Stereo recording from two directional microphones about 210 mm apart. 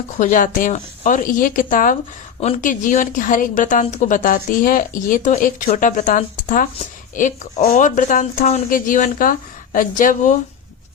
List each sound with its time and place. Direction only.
0.2 s a woman's voice: 40° left (ahead or behind)